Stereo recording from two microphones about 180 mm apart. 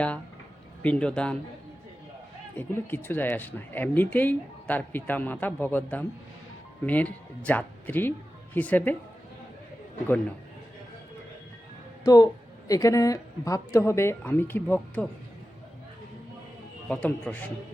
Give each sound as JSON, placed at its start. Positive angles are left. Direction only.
{"t": 0.8, "sound": "speech", "side_deg": 5}
{"t": 2.6, "sound": "speech", "side_deg": 10}
{"t": 12.0, "sound": "speech", "side_deg": 20}
{"t": 16.9, "sound": "speech", "side_deg": 5}